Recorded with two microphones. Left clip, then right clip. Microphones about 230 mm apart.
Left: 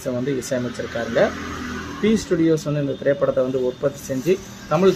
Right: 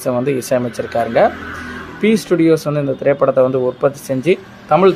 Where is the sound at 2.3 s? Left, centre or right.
Centre.